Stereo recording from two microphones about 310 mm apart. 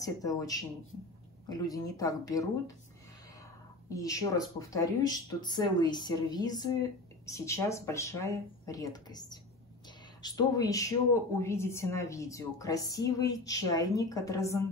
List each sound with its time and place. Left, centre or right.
0.0 s a woman's voice: centre
3.9 s a woman's voice: centre